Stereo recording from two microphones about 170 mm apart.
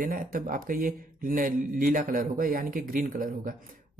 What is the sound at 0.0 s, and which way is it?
Speech, 55° right (ahead or behind).